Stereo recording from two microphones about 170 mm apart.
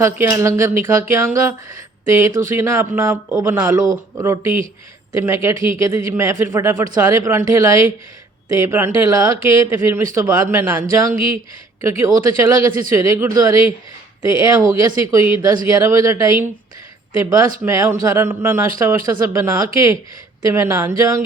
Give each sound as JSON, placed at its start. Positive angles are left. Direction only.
{"t": 0.3, "sound": "speech", "side_deg": -15}